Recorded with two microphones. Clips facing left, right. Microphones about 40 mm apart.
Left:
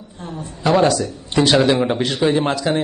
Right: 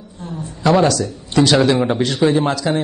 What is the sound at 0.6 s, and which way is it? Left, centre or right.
A man's voice, left.